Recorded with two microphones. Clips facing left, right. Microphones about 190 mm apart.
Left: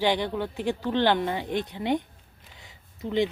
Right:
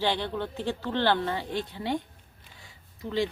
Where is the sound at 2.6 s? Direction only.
20° left (ahead or behind).